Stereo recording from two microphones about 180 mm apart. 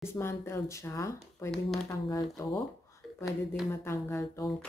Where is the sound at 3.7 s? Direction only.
15° left (ahead or behind).